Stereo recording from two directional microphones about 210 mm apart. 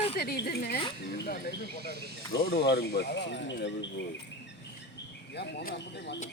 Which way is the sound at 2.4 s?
45° left (ahead or behind).